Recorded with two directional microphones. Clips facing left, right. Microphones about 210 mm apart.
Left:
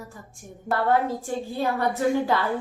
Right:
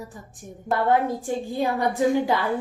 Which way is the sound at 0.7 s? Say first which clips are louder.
Right 1 dB; 15° right (ahead or behind).